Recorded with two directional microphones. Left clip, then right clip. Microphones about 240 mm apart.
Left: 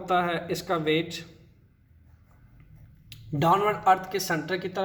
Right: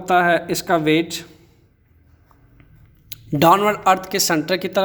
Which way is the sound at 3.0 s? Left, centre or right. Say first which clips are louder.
Right 10 dB; right.